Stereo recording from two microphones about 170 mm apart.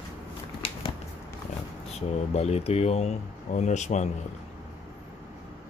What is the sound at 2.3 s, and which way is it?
Speech, 40° left (ahead or behind).